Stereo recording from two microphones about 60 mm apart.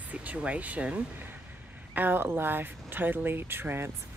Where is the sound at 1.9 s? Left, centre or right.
Right.